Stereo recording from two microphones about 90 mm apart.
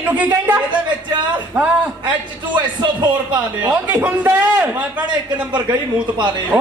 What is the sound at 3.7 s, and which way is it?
Speech, 20° right (ahead or behind).